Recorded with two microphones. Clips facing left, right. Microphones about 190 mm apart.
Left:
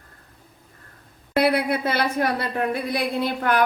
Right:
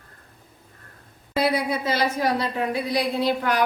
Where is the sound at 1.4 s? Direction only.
60° left (ahead or behind).